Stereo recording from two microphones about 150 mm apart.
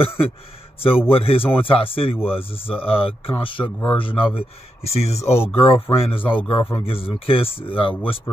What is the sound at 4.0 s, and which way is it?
Speech, 35° left (ahead or behind).